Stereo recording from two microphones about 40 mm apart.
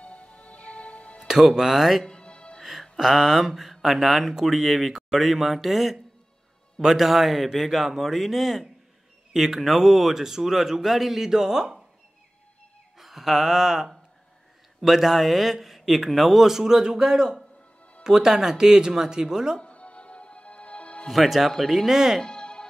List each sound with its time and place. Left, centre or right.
0.0 s music: left
1.2 s music: centre
1.6 s speech: centre
2.0 s music: left
3.0 s speech: centre
12.9 s speech: centre
19.6 s music: left
21.1 s speech: centre
21.8 s speech: centre
22.2 s music: centre